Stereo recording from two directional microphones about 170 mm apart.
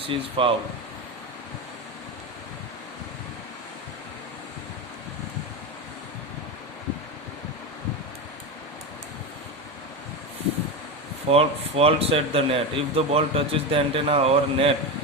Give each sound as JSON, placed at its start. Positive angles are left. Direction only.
{"t": 0.1, "sound": "a man's voice", "side_deg": -30}
{"t": 11.3, "sound": "a man's voice", "side_deg": -35}